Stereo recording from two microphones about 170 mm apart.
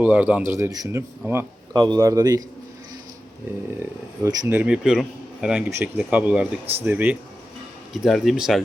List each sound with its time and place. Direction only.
0.0 s a man's voice: 10° right (ahead or behind)
1.7 s a man's voice: 25° right (ahead or behind)
3.8 s a man's voice: 15° right (ahead or behind)